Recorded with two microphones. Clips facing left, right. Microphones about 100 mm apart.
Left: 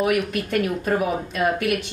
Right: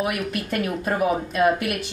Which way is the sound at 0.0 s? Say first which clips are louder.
Left 4 dB; centre (ahead or behind).